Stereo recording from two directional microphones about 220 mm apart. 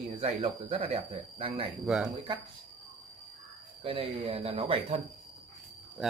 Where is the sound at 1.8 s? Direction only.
Centre (ahead or behind).